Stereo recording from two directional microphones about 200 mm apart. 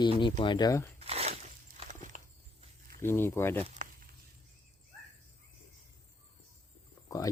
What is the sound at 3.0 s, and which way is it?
Speech, 10° left (ahead or behind).